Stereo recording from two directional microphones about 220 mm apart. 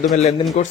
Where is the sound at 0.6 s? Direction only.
30° left (ahead or behind).